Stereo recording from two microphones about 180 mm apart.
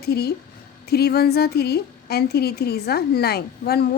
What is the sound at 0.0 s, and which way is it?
A woman's voice, 60° left (ahead or behind).